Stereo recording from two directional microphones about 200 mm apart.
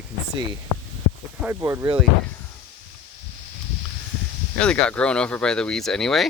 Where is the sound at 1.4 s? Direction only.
10° right (ahead or behind).